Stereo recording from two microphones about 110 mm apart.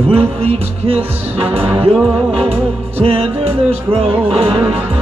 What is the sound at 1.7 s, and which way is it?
Music, 15° right (ahead or behind).